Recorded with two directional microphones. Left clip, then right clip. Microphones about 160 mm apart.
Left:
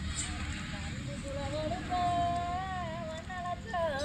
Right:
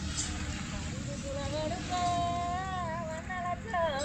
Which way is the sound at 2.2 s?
Centre (ahead or behind).